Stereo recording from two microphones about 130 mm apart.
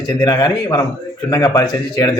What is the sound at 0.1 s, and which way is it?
A man's voice, 30° left (ahead or behind).